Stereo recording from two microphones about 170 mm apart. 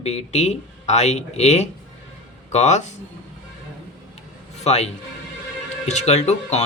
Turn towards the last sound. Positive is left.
turn(degrees=40)  # may be behind; listen again after turning